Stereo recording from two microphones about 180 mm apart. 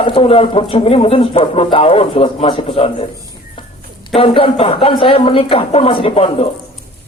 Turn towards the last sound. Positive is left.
turn(degrees=35)  # may be behind; listen again after turning